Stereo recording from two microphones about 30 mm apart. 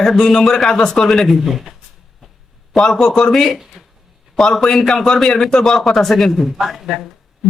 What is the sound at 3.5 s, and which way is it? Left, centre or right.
Speech, centre.